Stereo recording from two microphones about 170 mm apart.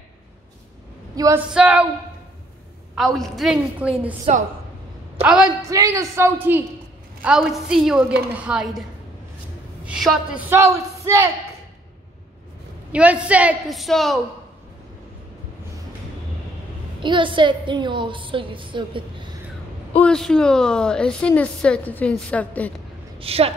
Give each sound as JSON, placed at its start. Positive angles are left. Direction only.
{"t": 1.1, "sound": "speech", "side_deg": -20}
{"t": 1.5, "sound": "a woman's voice", "side_deg": -10}
{"t": 3.0, "sound": "a woman's voice", "side_deg": 0}
{"t": 4.3, "sound": "a woman's voice", "side_deg": -40}
{"t": 5.2, "sound": "a woman's voice", "side_deg": -5}
{"t": 5.7, "sound": "a woman's voice", "side_deg": -20}
{"t": 9.8, "sound": "a woman's voice", "side_deg": 0}
{"t": 10.5, "sound": "a woman's voice", "side_deg": -15}
{"t": 12.9, "sound": "a woman's voice", "side_deg": -10}
{"t": 17.0, "sound": "a woman's voice", "side_deg": -30}
{"t": 20.0, "sound": "a woman's voice", "side_deg": 5}
{"t": 23.1, "sound": "a woman's voice", "side_deg": -35}